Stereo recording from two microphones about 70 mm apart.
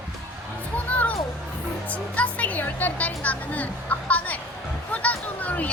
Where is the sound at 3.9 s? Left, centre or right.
Left.